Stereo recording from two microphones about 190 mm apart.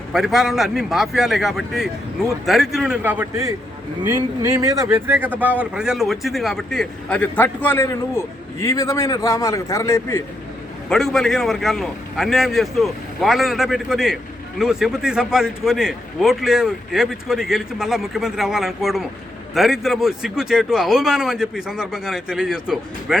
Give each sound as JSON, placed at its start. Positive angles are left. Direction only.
{"t": 0.1, "sound": "a man's voice", "side_deg": 0}
{"t": 10.8, "sound": "a man's voice", "side_deg": 0}